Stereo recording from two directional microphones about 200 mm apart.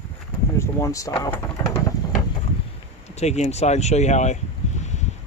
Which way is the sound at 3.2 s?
35° left (ahead or behind).